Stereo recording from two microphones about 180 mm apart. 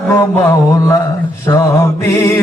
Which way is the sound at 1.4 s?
15° left (ahead or behind).